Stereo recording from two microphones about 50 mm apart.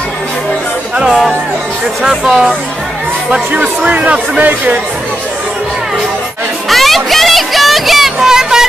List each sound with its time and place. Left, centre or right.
0.9 s speech: centre
3.6 s speech: right
6.7 s a sound: centre